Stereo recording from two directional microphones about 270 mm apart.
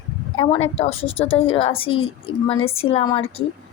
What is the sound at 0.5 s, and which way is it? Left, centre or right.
Speech, left.